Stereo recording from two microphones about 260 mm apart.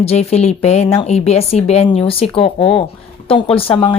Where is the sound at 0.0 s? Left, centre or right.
Left.